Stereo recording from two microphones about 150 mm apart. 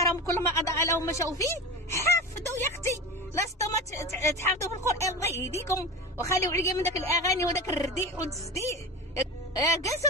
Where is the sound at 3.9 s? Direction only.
20° left (ahead or behind).